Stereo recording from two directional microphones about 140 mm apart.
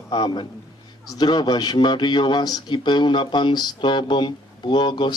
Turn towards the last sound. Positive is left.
turn(degrees=30)  # may be behind; listen again after turning